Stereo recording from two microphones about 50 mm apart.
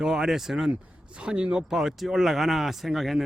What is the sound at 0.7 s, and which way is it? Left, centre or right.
Speech, centre.